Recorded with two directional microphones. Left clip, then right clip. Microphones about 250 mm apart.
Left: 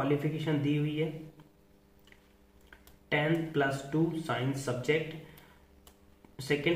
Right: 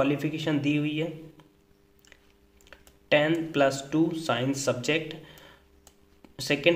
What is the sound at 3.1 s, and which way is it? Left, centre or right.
A man's voice, right.